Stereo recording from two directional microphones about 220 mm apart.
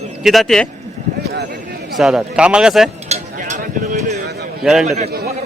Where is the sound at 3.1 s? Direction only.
30° right (ahead or behind).